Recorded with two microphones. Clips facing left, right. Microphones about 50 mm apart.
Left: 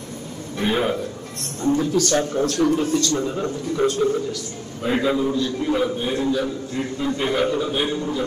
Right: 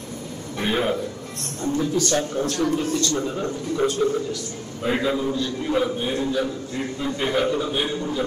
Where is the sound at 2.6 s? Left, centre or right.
Left.